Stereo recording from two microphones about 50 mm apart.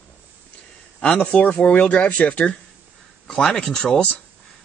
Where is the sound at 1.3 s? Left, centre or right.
Left.